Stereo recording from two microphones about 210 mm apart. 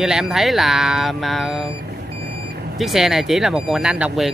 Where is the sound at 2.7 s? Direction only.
Centre (ahead or behind).